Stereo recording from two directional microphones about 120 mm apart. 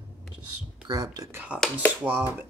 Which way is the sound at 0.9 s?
30° right (ahead or behind).